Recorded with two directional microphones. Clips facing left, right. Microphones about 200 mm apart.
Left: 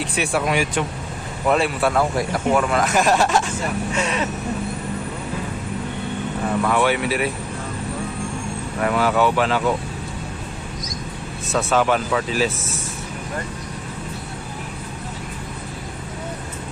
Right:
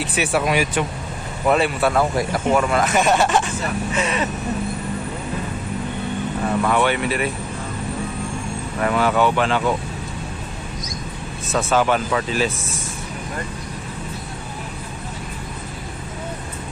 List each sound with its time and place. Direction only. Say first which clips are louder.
0.0 s speech: right 1 dB; 5° right (ahead or behind)
6.6 s speech: even; centre (ahead or behind)
8.8 s speech: even; 5° left (ahead or behind)
11.4 s speech: even; centre (ahead or behind)